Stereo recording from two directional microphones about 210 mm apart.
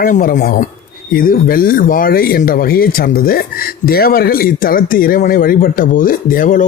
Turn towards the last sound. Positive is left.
turn(degrees=40)  # may be behind; listen again after turning